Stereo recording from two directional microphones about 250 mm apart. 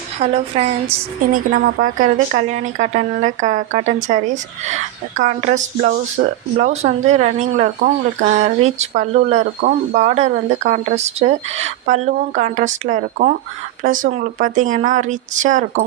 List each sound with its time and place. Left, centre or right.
0.2 s speech: right